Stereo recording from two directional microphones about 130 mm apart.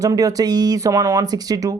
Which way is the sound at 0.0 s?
25° right (ahead or behind).